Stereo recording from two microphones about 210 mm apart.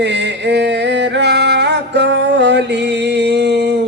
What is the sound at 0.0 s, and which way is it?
Music, 55° right (ahead or behind).